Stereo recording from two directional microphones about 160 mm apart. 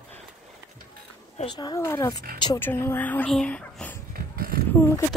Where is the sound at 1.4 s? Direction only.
25° left (ahead or behind); by 3.9 s 5° left (ahead or behind).